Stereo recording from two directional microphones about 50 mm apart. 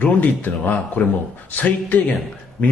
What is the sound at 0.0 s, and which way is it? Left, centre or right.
A man's voice, left.